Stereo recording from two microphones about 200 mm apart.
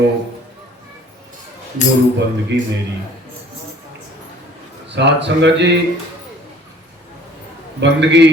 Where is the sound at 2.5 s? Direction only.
65° right (ahead or behind).